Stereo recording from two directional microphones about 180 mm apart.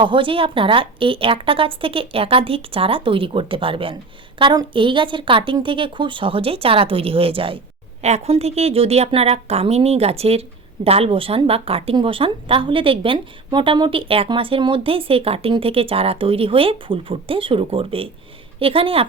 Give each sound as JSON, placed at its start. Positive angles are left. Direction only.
{"t": 0.0, "sound": "a woman's voice", "side_deg": -30}